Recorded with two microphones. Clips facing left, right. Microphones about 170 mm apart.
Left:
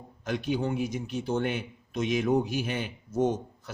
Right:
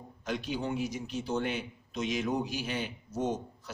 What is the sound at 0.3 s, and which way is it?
A man's voice, 55° left (ahead or behind).